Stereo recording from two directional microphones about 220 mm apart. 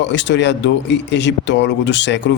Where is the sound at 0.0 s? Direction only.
55° left (ahead or behind).